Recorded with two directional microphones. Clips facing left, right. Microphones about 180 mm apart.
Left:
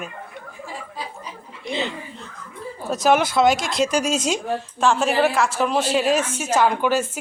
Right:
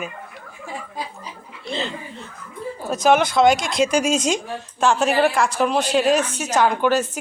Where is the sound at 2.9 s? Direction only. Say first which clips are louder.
Right 1 dB; centre (ahead or behind).